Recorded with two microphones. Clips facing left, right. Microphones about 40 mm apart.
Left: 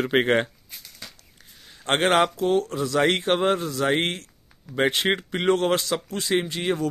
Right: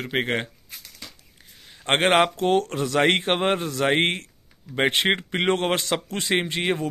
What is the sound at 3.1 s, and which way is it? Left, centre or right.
Speech, right.